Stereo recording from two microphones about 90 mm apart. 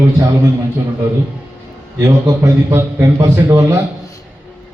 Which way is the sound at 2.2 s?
35° right (ahead or behind).